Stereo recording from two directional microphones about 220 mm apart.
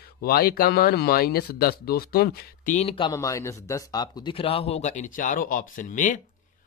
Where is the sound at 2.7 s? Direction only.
25° left (ahead or behind).